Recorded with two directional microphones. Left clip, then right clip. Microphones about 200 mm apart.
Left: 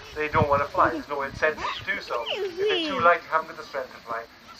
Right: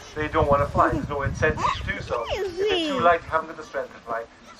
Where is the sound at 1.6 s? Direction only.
45° right (ahead or behind).